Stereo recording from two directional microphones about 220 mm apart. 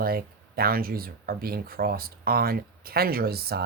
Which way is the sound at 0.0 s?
45° right (ahead or behind).